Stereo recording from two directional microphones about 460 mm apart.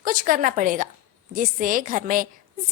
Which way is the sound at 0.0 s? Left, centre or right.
Centre.